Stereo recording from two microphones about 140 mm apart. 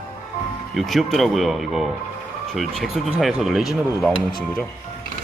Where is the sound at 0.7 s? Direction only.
Centre (ahead or behind).